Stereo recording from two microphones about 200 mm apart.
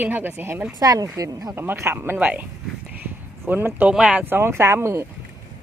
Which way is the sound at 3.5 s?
10° right (ahead or behind).